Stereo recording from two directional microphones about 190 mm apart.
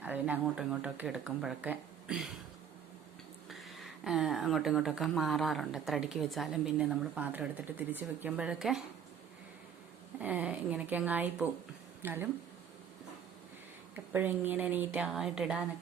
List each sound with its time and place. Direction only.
0.0 s speech: 5° right (ahead or behind)
3.5 s speech: centre (ahead or behind)
10.2 s speech: 10° right (ahead or behind)
13.9 s speech: 10° right (ahead or behind)